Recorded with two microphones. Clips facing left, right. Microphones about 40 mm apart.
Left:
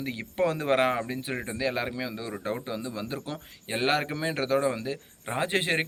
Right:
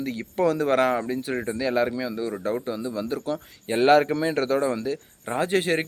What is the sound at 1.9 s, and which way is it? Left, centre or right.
Speech, left.